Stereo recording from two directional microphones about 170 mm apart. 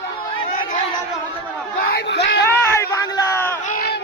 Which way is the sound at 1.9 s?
70° left (ahead or behind).